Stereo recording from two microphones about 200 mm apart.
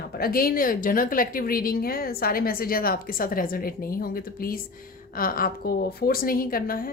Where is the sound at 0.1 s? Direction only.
50° left (ahead or behind).